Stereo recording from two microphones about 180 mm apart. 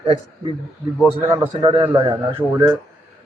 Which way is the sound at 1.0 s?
10° right (ahead or behind).